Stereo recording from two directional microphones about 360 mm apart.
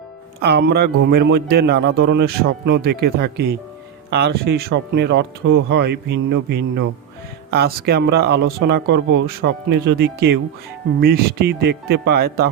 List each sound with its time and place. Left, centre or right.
0.3 s a man's voice: right